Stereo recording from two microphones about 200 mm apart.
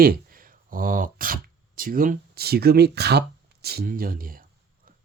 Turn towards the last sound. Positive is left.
turn(degrees=-45)  # may be behind; listen again after turning